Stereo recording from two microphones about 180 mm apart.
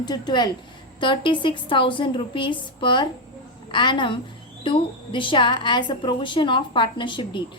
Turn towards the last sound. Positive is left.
turn(degrees=25)  # may be behind; listen again after turning